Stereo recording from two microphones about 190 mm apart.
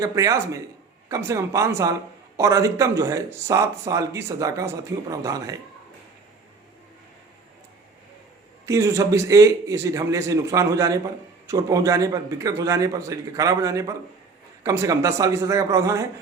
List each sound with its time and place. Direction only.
0.0 s speech: 15° right (ahead or behind)
8.6 s speech: 15° right (ahead or behind)